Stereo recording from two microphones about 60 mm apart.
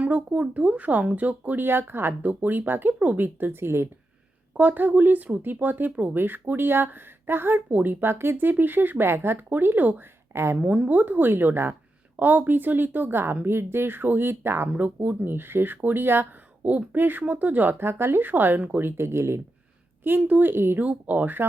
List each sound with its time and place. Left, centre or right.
0.0 s speech: right
3.2 s speech: right
4.5 s speech: right
10.3 s speech: right
10.6 s speech: right
14.7 s speech: right
20.1 s speech: right
20.5 s speech: right
20.7 s speech: right